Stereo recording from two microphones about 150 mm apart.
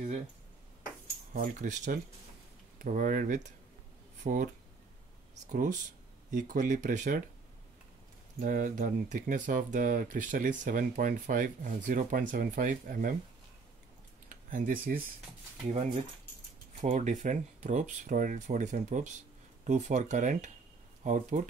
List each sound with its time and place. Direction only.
1.3 s speech: 65° right (ahead or behind)
8.4 s speech: 65° right (ahead or behind)
14.3 s speech: 65° right (ahead or behind)
15.7 s speech: 50° right (ahead or behind)